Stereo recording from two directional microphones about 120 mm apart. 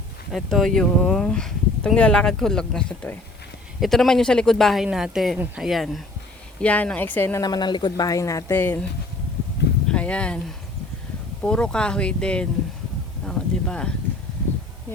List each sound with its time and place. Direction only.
0.3 s speech: centre (ahead or behind)
6.6 s speech: 10° left (ahead or behind)
7.4 s speech: 35° left (ahead or behind); by 8.9 s 15° left (ahead or behind)
9.9 s speech: 10° left (ahead or behind)
11.4 s speech: 5° left (ahead or behind)
13.2 s a sound: 10° left (ahead or behind)